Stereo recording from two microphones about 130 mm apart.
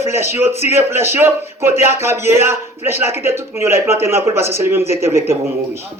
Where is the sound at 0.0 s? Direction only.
20° right (ahead or behind).